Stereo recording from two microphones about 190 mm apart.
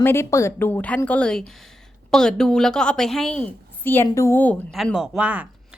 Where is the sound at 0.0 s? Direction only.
15° left (ahead or behind).